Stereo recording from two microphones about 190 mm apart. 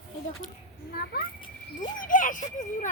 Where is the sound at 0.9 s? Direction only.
55° left (ahead or behind).